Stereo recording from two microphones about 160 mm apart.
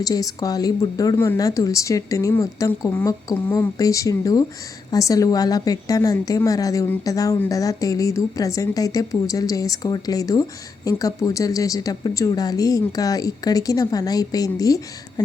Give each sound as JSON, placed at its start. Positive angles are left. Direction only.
{"t": 0.0, "sound": "a woman's voice", "side_deg": 20}